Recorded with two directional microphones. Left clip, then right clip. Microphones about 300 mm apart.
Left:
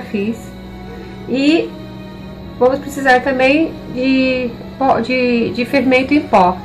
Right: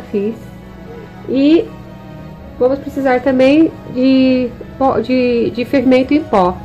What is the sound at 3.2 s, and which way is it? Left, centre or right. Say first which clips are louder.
A woman's voice: right 3 dB; right.